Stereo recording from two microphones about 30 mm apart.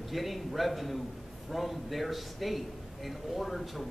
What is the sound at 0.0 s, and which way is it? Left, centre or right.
A man's voice, centre.